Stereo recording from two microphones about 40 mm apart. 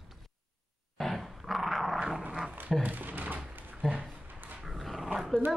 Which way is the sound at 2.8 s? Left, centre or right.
Right.